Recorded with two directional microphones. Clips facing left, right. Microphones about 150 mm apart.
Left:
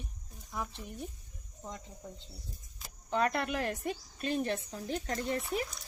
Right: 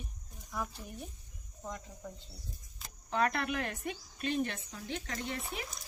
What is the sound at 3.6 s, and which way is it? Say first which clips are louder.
A woman's voice: left 4 dB; 30° left (ahead or behind).